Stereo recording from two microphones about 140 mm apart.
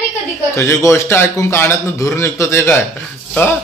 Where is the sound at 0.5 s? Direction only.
20° left (ahead or behind).